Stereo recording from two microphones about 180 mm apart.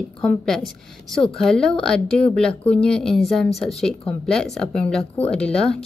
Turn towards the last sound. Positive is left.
turn(degrees=5)  # may be behind; listen again after turning